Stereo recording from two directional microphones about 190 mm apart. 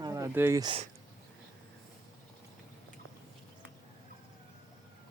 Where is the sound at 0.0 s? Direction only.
15° right (ahead or behind).